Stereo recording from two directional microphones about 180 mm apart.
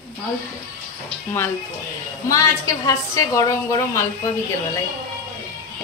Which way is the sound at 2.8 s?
20° left (ahead or behind).